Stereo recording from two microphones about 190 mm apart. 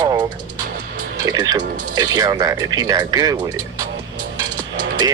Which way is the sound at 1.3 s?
20° right (ahead or behind).